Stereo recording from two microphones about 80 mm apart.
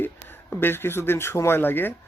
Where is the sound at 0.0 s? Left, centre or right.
Left.